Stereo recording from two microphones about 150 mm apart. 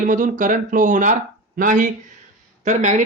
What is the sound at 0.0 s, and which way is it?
Speech, 60° right (ahead or behind).